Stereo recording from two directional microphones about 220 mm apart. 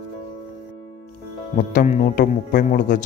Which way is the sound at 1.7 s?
35° left (ahead or behind).